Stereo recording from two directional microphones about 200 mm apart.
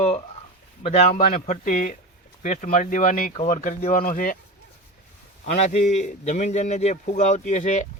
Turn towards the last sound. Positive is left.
turn(degrees=40)  # may be behind; listen again after turning